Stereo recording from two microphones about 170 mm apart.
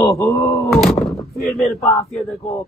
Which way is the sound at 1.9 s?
40° left (ahead or behind).